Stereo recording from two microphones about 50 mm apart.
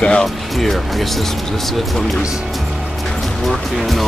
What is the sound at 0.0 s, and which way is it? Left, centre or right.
Speech, centre.